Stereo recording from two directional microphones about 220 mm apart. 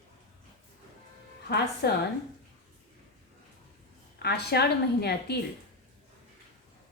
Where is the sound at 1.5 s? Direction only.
50° left (ahead or behind).